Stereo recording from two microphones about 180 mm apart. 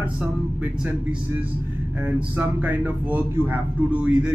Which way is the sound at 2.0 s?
10° right (ahead or behind).